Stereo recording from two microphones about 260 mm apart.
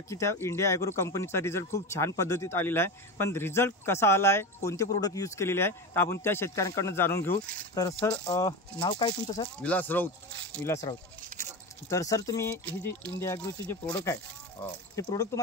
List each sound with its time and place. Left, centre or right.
0.1 s speech: centre
9.6 s speech: centre